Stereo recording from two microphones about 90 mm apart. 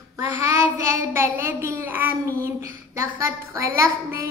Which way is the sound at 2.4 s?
30° right (ahead or behind).